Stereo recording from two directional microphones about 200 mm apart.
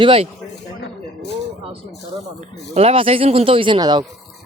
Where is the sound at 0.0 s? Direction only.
25° right (ahead or behind).